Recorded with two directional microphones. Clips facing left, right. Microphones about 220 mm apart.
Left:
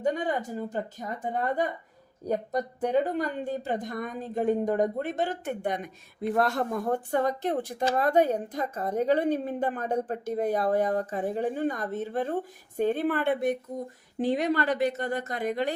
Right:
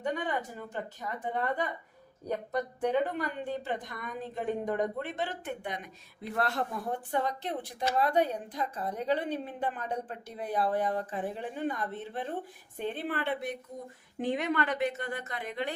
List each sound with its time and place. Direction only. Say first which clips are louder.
0.0 s a woman's voice: left 5 dB; 40° left (ahead or behind)
14.2 s a woman's voice: left 4 dB; 35° left (ahead or behind)